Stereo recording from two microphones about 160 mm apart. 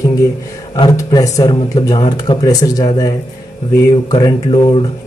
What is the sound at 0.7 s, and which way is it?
Speech, 25° left (ahead or behind).